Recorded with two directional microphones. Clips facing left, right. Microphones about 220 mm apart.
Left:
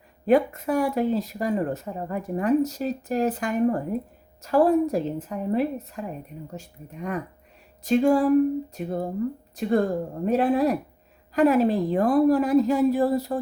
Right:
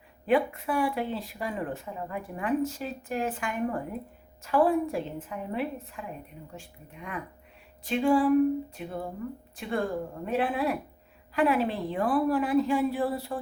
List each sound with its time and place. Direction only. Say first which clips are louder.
0.3 s speech: left 5 dB; 40° left (ahead or behind)